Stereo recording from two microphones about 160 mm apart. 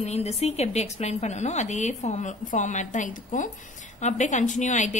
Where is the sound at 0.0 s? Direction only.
40° left (ahead or behind).